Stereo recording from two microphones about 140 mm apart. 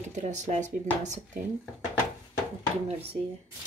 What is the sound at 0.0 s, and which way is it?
Speech, 60° right (ahead or behind).